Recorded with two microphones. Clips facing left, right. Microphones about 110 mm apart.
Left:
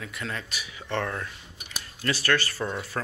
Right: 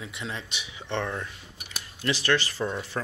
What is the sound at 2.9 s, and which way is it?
Speech, 5° right (ahead or behind).